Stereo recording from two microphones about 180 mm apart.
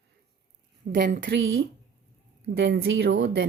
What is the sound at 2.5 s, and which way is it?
Speech, 65° right (ahead or behind).